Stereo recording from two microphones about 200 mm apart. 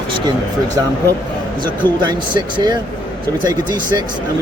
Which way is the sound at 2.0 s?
20° right (ahead or behind).